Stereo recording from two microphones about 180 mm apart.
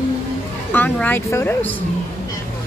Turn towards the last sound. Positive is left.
turn(degrees=10)  # may be behind; listen again after turning